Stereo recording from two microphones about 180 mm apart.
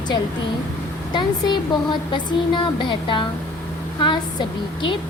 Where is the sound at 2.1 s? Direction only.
25° left (ahead or behind).